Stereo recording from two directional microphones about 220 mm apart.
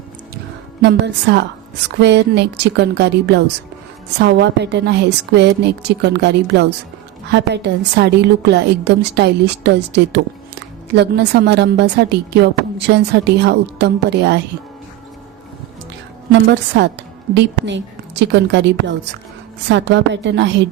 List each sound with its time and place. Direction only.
0.8 s a woman's voice: 50° right (ahead or behind)
16.3 s a woman's voice: 55° right (ahead or behind)